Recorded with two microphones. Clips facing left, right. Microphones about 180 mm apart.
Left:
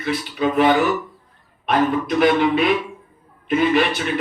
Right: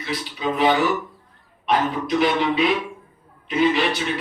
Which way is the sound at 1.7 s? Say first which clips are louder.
Left 2 dB; 55° left (ahead or behind).